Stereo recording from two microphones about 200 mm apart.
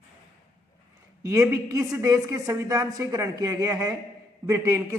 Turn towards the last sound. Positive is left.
turn(degrees=-15)  # may be behind; listen again after turning